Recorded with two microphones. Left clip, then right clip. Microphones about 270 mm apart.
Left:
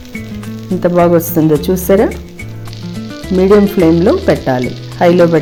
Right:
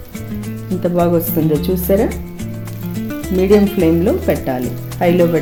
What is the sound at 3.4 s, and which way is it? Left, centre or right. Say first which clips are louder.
Speech: left 4 dB; left.